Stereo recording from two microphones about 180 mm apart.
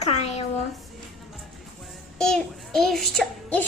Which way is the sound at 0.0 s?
35° left (ahead or behind).